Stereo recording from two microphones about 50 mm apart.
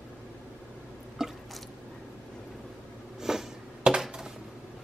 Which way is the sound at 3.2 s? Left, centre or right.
Centre.